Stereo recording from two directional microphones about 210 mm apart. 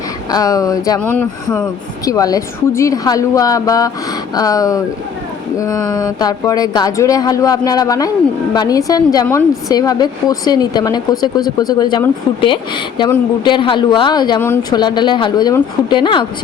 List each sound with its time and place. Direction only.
0.3 s speech: 15° left (ahead or behind)